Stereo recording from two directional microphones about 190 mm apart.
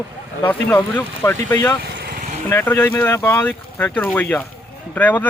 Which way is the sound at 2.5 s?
10° left (ahead or behind).